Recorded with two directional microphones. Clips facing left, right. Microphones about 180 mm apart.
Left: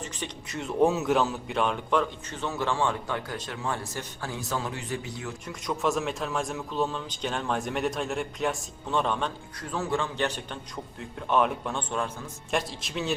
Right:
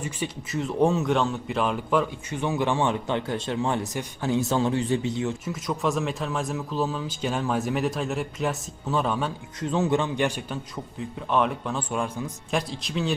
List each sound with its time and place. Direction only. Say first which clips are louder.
0.0 s a man's voice: right 5 dB; 5° right (ahead or behind); by 5.3 s 25° right (ahead or behind)
5.5 s a man's voice: right 2 dB; centre (ahead or behind)
9.6 s a man's voice: right 6 dB; 20° right (ahead or behind)
11.0 s a man's voice: right 1 dB; centre (ahead or behind)
12.5 s a man's voice: even; centre (ahead or behind)